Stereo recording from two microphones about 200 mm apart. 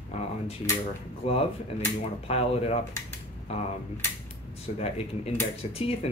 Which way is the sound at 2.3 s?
30° left (ahead or behind).